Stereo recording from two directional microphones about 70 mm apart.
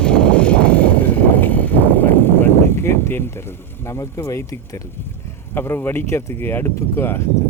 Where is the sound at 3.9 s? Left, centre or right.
Left.